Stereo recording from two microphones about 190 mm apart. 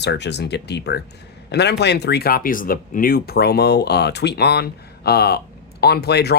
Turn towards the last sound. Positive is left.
turn(degrees=60)  # may be behind; listen again after turning